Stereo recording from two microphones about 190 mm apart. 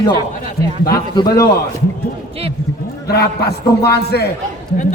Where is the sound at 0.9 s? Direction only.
20° left (ahead or behind).